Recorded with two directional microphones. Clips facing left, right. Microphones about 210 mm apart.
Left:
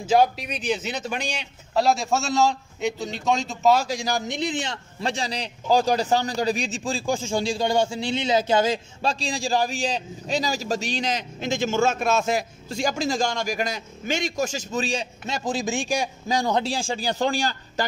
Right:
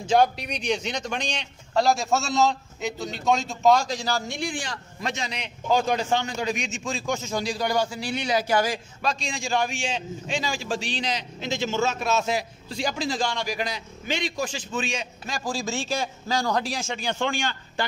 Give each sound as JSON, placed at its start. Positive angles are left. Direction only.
{"t": 0.0, "sound": "a man's voice", "side_deg": 5}